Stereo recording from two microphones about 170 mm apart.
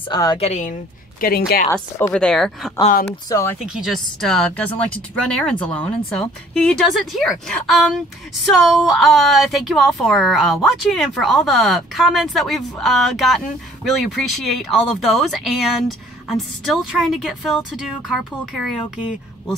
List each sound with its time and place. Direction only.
0.1 s speech: 25° left (ahead or behind)
0.4 s speech: 45° left (ahead or behind)
1.2 s a woman's voice: 60° left (ahead or behind)
1.7 s speech: 15° left (ahead or behind)
2.1 s speech: 5° left (ahead or behind)
3.1 s speech: 15° left (ahead or behind)
3.5 s speech: 5° right (ahead or behind)